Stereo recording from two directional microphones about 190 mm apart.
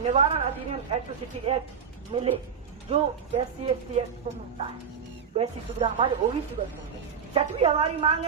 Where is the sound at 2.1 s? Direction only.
30° right (ahead or behind).